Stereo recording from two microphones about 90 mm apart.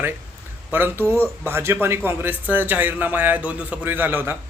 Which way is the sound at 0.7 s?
20° right (ahead or behind).